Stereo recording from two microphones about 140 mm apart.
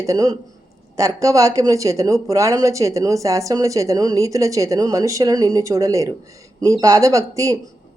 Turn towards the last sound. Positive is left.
turn(degrees=-25)  # may be behind; listen again after turning